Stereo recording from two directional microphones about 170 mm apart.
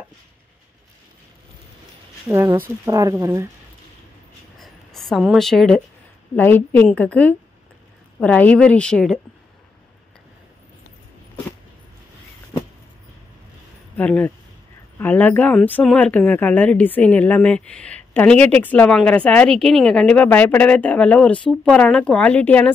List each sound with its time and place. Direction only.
2.2 s speech: 15° right (ahead or behind)
4.6 s a sound: centre (ahead or behind)
6.3 s speech: 10° left (ahead or behind)
13.9 s speech: 10° left (ahead or behind)